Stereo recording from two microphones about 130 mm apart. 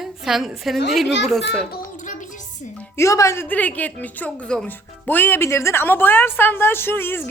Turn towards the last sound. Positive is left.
turn(degrees=15)  # may be behind; listen again after turning